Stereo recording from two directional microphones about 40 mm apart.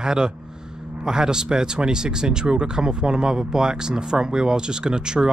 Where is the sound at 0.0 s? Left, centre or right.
Centre.